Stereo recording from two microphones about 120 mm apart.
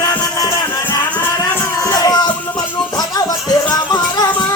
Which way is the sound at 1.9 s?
35° left (ahead or behind).